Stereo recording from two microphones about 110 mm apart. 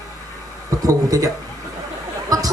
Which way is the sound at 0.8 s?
35° right (ahead or behind).